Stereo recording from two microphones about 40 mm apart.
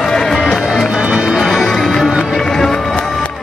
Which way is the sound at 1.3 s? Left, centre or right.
Centre.